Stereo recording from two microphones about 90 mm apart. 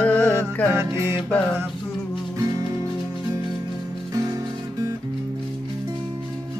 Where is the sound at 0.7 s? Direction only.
30° right (ahead or behind).